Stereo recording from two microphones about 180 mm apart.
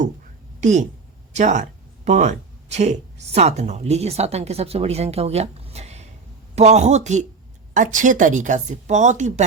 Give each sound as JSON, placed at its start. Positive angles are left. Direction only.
{"t": 0.6, "sound": "speech", "side_deg": -40}